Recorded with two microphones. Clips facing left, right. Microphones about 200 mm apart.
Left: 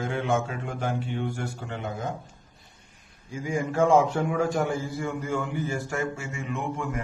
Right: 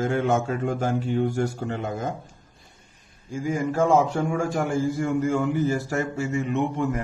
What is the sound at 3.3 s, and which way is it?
A man's voice, 45° right (ahead or behind).